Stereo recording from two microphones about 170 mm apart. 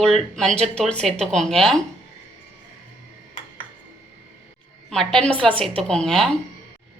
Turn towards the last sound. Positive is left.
turn(degrees=0)  # may be behind; listen again after turning